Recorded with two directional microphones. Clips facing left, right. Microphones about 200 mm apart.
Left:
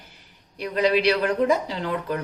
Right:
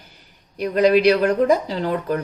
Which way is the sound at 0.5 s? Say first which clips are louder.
Right 6 dB; 45° right (ahead or behind).